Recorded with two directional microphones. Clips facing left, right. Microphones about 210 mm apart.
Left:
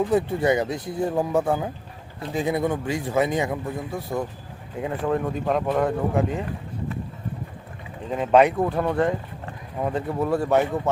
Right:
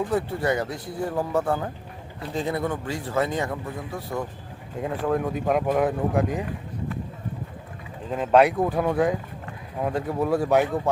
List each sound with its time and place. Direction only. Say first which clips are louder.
0.1 s speech: left 4 dB; 20° left (ahead or behind)
4.8 s speech: even; centre (ahead or behind)
8.1 s speech: left 1 dB; centre (ahead or behind)